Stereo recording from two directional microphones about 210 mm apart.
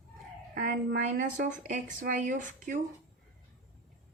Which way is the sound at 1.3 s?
35° right (ahead or behind).